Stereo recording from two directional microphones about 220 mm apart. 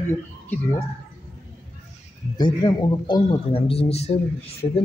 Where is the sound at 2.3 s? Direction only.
20° left (ahead or behind).